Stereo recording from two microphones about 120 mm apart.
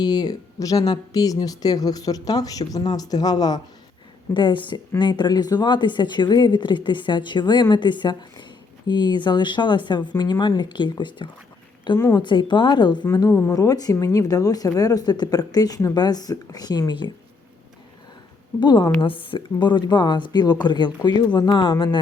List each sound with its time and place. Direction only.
0.0 s speech: 35° left (ahead or behind)
18.6 s speech: 40° left (ahead or behind)